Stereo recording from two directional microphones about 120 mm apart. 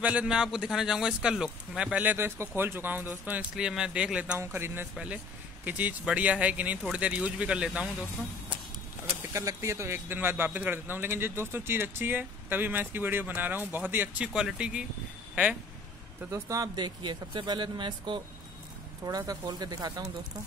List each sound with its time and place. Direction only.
0.0 s a man's voice: 10° right (ahead or behind)
4.4 s a man's voice: 20° right (ahead or behind)
9.3 s a man's voice: 25° right (ahead or behind); by 14.9 s 10° right (ahead or behind)
16.3 s speech: 25° right (ahead or behind)
19.0 s speech: 30° right (ahead or behind)